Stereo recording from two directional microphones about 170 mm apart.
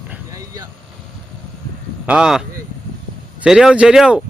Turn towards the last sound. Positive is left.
turn(degrees=0)  # may be behind; listen again after turning